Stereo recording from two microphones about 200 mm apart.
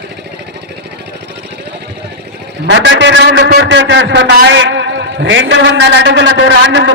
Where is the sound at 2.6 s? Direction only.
60° right (ahead or behind).